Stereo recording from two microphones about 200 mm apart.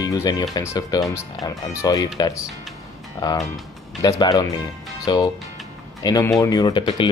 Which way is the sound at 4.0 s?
20° left (ahead or behind).